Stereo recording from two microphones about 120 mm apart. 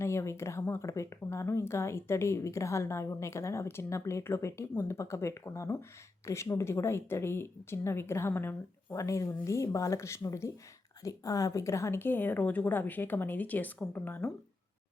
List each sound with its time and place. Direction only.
0.0 s speech: 25° left (ahead or behind)